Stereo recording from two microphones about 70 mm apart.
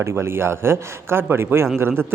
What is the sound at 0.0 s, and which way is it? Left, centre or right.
Speech, right.